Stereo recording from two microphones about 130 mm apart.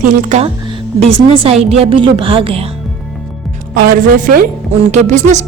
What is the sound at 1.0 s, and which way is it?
A woman's voice, 45° right (ahead or behind).